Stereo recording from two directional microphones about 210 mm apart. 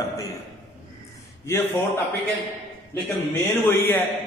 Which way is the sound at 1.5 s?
10° left (ahead or behind).